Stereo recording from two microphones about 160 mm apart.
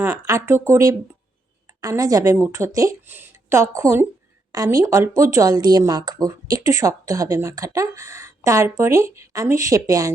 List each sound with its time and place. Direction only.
0.0 s speech: 20° right (ahead or behind)